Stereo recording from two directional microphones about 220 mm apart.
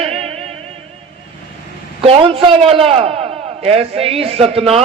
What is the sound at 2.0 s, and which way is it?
A man's voice, 25° right (ahead or behind).